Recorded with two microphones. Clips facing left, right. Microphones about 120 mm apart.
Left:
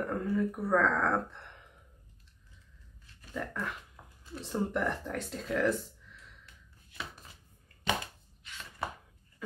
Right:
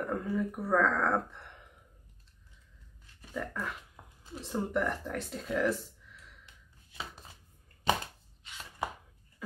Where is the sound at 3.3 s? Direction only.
Centre (ahead or behind).